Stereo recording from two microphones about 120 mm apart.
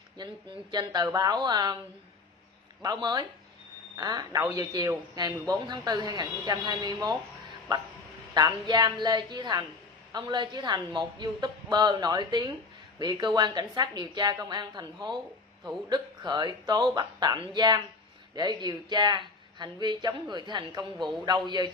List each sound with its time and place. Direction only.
0.2 s speech: 35° right (ahead or behind)
2.8 s speech: 30° right (ahead or behind)
8.4 s speech: 35° right (ahead or behind)